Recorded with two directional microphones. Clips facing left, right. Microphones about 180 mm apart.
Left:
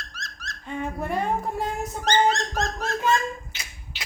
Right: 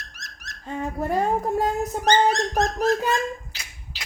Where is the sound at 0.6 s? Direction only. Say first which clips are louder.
Right 2 dB; 40° right (ahead or behind).